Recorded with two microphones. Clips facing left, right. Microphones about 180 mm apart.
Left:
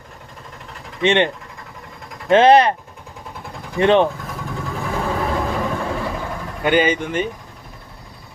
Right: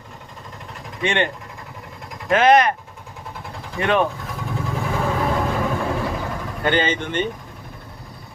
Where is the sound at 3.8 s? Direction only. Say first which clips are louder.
Left 6 dB; 30° left (ahead or behind).